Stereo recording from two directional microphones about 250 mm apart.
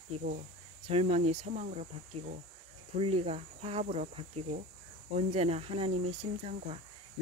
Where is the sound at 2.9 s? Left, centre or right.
Right.